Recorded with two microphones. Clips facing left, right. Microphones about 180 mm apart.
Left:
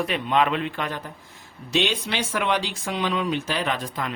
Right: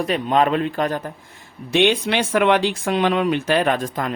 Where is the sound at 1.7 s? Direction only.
60° right (ahead or behind).